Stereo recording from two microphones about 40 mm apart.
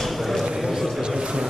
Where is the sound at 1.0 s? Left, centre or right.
Centre.